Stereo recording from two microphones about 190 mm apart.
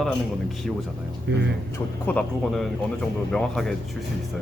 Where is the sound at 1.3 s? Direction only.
65° right (ahead or behind).